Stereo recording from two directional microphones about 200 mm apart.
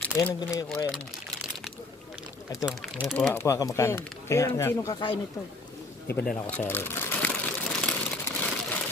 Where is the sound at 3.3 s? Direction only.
15° left (ahead or behind).